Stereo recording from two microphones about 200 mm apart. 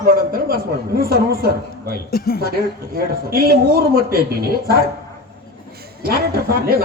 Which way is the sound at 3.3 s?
50° right (ahead or behind).